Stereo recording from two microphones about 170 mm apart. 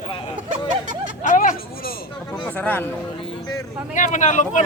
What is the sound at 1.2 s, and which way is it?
Speech, 50° left (ahead or behind).